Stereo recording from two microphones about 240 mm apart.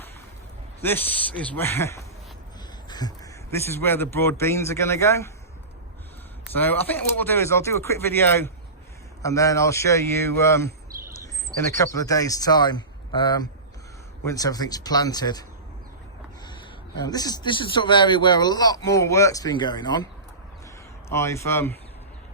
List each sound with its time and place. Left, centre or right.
0.8 s a man's voice: centre
3.5 s a man's voice: centre
6.5 s a man's voice: centre
11.8 s a man's voice: centre
16.5 s a man's voice: centre
21.1 s a man's voice: centre